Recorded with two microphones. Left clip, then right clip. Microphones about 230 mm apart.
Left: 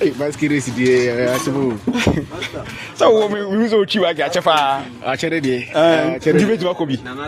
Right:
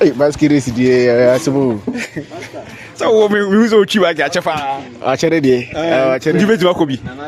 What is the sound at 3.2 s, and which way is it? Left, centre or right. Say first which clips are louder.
A man's voice: right 6 dB; right.